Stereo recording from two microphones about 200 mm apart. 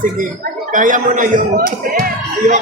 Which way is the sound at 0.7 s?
40° right (ahead or behind).